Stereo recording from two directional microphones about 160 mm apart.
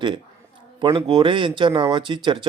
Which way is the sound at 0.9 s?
30° right (ahead or behind).